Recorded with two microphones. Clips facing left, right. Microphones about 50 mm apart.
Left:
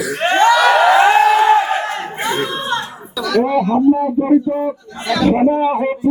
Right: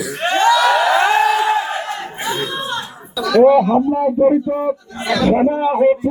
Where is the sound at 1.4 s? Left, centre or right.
Left.